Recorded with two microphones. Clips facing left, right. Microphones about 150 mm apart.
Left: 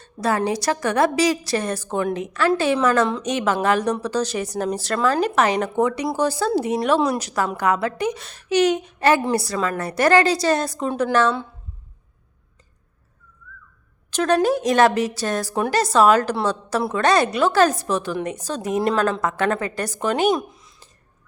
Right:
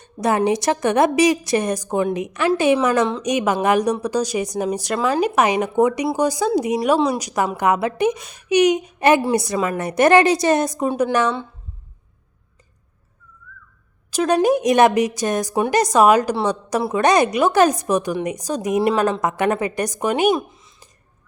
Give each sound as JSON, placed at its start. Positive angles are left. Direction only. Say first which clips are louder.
{"t": 0.0, "sound": "a woman's voice", "louder": "right 3 dB", "side_deg": -20}
{"t": 14.1, "sound": "a woman's voice", "louder": "right 2 dB", "side_deg": -10}
{"t": 20.3, "sound": "a sound", "louder": "right 1 dB", "side_deg": 0}